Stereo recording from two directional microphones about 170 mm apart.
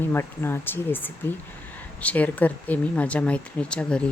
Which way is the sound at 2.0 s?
10° left (ahead or behind).